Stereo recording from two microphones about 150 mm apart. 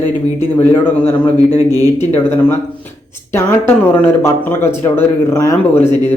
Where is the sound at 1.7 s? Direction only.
25° right (ahead or behind).